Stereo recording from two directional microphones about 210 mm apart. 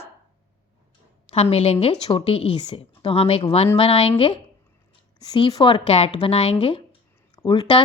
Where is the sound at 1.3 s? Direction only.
30° left (ahead or behind).